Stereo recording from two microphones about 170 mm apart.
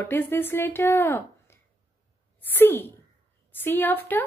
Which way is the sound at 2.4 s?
10° left (ahead or behind).